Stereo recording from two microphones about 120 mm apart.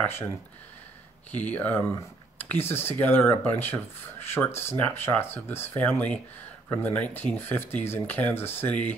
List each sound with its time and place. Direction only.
1.3 s speech: 15° left (ahead or behind)